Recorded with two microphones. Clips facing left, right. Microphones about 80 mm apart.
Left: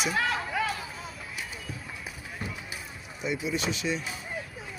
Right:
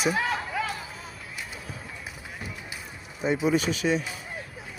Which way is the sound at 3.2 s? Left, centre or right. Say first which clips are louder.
Right 6 dB; right.